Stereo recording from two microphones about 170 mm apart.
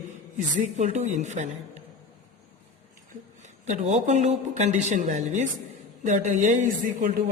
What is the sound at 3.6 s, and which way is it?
Speech, 45° right (ahead or behind).